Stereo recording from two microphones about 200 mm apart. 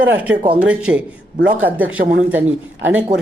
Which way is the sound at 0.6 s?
5° right (ahead or behind).